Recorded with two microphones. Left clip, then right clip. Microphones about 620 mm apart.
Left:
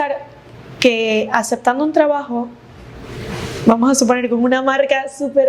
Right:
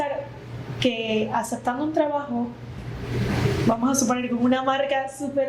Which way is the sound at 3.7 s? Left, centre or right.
Left.